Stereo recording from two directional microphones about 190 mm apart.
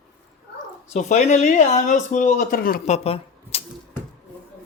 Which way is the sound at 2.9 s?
30° left (ahead or behind).